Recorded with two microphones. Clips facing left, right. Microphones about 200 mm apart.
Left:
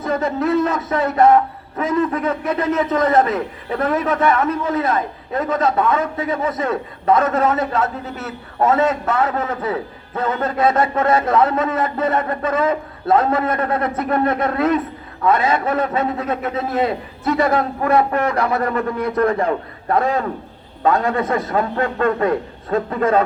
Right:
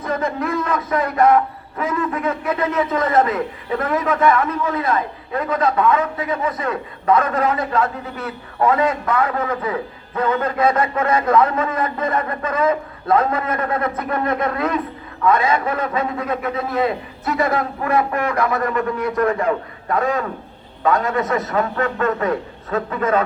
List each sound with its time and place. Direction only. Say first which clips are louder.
0.1 s a man's voice: left 4 dB; 30° left (ahead or behind)